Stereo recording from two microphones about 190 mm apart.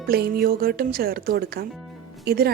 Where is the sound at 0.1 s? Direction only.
55° right (ahead or behind).